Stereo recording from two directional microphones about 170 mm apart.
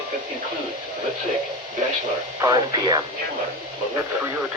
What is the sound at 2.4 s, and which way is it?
Speech, 20° right (ahead or behind).